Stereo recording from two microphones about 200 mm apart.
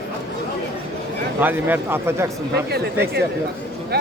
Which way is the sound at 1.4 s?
10° right (ahead or behind).